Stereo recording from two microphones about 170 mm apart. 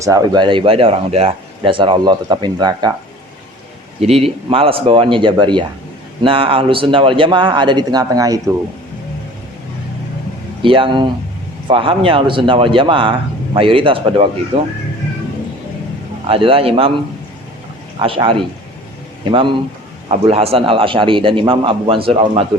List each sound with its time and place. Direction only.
0.0 s speech: 20° right (ahead or behind)
4.0 s a man's voice: 35° right (ahead or behind)
10.6 s a man's voice: 30° right (ahead or behind)
16.2 s a man's voice: 35° right (ahead or behind)
18.0 s a man's voice: 30° right (ahead or behind)